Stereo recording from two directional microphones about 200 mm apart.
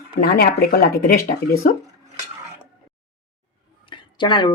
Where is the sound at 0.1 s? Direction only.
50° left (ahead or behind).